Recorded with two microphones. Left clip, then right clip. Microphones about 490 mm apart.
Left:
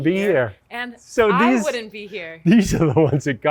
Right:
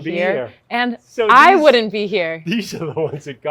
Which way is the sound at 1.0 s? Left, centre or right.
Left.